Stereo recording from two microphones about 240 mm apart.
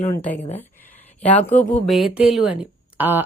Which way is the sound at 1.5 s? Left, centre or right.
Centre.